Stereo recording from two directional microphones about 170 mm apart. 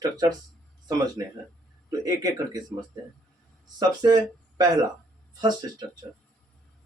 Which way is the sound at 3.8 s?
25° right (ahead or behind).